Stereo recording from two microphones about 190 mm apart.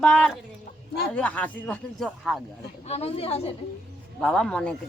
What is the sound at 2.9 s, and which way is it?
Speech, 30° left (ahead or behind).